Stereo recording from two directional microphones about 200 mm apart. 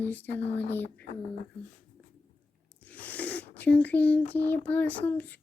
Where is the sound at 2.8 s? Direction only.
5° left (ahead or behind).